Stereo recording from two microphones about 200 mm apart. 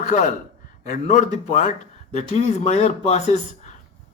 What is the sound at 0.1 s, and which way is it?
Speech, 40° left (ahead or behind).